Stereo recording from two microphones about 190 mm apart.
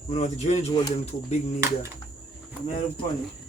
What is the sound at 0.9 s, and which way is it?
Speech, 35° left (ahead or behind).